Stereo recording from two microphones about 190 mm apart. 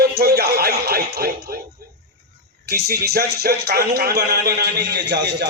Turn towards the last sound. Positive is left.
turn(degrees=-65)  # may be behind; listen again after turning